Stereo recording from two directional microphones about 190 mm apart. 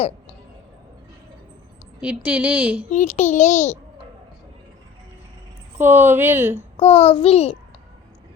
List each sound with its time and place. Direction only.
2.0 s a woman's voice: 10° right (ahead or behind)
2.9 s a child's voice: 40° left (ahead or behind)
5.7 s a woman's voice: 10° right (ahead or behind)
6.7 s a child's voice: 30° left (ahead or behind)